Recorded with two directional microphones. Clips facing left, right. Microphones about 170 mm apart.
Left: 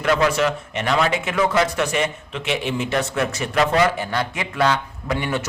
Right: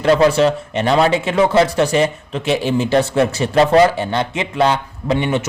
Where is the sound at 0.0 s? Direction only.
30° right (ahead or behind).